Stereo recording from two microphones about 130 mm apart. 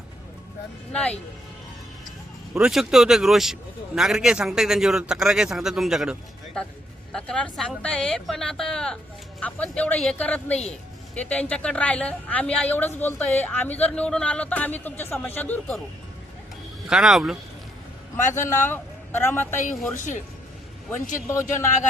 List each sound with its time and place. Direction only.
2.6 s a woman's voice: 5° right (ahead or behind); by 15.7 s 10° left (ahead or behind)
16.9 s speech: 5° right (ahead or behind)
18.3 s a man's voice: 20° left (ahead or behind)
20.0 s speech: 70° left (ahead or behind)
21.2 s a man's voice: 20° left (ahead or behind)